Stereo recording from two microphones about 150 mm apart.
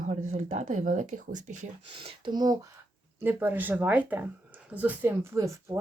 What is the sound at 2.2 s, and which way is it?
Speech, 25° right (ahead or behind).